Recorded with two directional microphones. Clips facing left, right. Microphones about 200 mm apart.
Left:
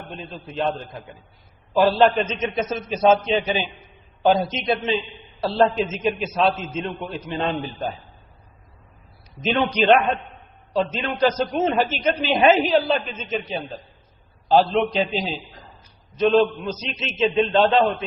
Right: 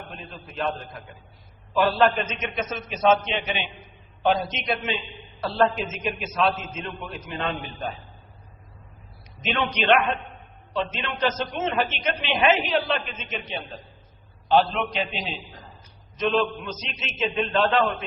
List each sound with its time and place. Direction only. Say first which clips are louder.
0.4 s a man's voice: left 4 dB; 30° left (ahead or behind)
9.4 s a woman's voice: left 6 dB; 35° left (ahead or behind)